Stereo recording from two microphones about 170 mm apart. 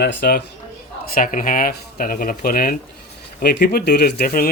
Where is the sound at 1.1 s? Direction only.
55° left (ahead or behind).